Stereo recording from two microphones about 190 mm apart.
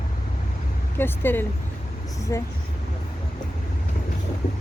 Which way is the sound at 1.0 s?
10° left (ahead or behind).